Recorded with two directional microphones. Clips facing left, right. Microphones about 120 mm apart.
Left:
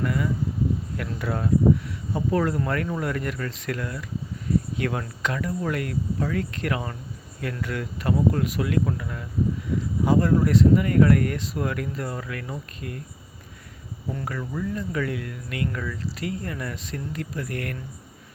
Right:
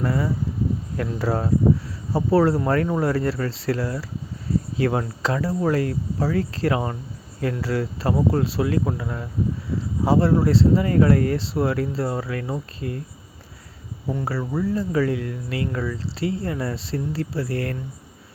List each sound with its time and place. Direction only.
0.0 s a sound: 35° right (ahead or behind)
0.9 s speech: 35° right (ahead or behind)
14.3 s speech: 30° right (ahead or behind)